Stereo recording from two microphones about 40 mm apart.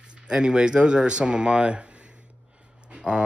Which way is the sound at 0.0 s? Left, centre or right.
Right.